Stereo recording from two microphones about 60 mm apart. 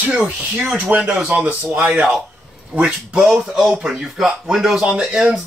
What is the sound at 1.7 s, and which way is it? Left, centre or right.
Speech, centre.